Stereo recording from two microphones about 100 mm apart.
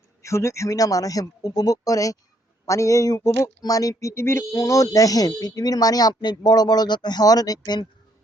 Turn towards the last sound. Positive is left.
turn(degrees=40)  # may be behind; listen again after turning